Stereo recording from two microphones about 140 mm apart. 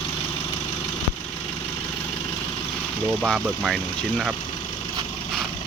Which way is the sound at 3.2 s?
Centre (ahead or behind).